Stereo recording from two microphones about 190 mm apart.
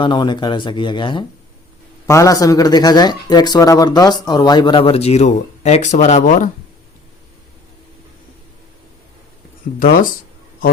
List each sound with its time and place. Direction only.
0.0 s speech: 25° left (ahead or behind); by 6.5 s 40° left (ahead or behind)